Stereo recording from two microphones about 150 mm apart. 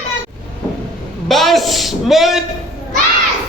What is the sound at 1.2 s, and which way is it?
A woman's voice, centre (ahead or behind).